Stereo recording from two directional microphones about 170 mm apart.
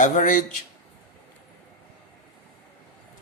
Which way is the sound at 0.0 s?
50° left (ahead or behind).